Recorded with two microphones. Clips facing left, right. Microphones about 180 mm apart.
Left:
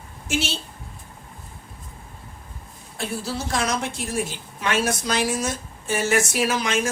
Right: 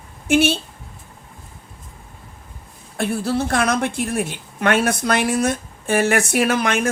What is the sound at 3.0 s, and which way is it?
A woman's voice, 60° right (ahead or behind).